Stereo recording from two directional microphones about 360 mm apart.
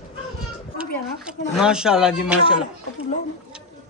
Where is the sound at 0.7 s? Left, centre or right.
Centre.